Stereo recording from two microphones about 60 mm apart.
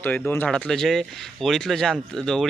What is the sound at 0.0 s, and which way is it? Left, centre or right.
Speech, left.